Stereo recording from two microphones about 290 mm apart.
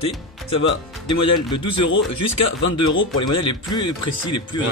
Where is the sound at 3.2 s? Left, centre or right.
Centre.